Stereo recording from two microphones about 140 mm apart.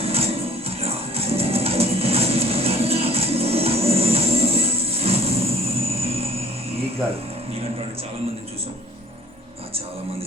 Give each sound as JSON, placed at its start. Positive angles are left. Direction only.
{"t": 0.0, "sound": "music", "side_deg": -45}